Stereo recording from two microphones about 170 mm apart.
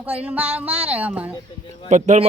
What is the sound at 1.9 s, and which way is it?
Speech, 45° right (ahead or behind).